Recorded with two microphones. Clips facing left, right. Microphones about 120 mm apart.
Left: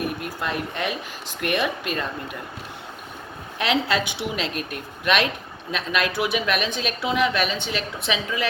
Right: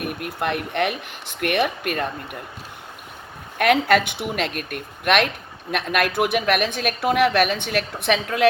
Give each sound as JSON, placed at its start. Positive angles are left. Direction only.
{"t": 0.3, "sound": "a woman's voice", "side_deg": -60}
{"t": 3.6, "sound": "a woman's voice", "side_deg": -55}